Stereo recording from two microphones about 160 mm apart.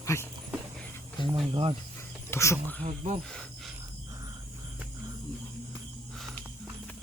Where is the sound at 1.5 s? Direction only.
30° right (ahead or behind).